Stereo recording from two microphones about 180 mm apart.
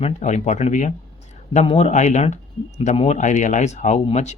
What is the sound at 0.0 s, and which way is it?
Speech, 40° left (ahead or behind).